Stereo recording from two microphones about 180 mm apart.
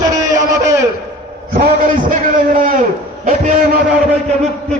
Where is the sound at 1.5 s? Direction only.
50° right (ahead or behind).